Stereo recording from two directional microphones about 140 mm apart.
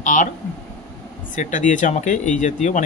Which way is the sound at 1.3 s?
65° left (ahead or behind).